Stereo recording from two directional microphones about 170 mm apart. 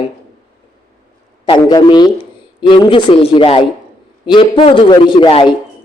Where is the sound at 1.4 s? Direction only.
25° left (ahead or behind).